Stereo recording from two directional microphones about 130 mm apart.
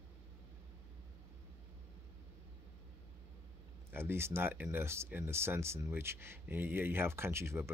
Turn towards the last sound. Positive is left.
turn(degrees=-20)  # may be behind; listen again after turning